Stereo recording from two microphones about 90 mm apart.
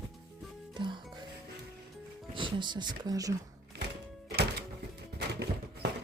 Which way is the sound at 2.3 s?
65° right (ahead or behind).